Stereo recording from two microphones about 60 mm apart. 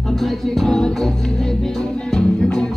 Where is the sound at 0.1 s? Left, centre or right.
Centre.